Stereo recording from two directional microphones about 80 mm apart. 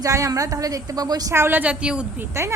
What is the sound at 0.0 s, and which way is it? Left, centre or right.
A woman's voice, right.